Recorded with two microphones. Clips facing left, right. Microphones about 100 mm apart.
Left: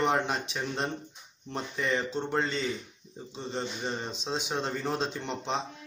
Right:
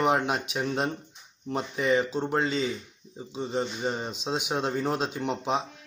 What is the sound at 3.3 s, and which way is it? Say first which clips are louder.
Speech: right 5 dB; 10° right (ahead or behind).